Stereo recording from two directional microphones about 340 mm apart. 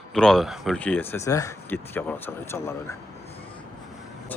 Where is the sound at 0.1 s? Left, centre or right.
Centre.